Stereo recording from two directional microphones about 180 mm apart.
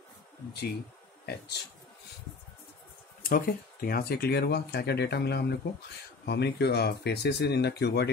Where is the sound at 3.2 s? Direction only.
55° left (ahead or behind).